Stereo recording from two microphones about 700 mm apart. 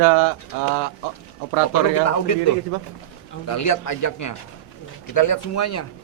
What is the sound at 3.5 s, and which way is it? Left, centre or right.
A man's voice, left.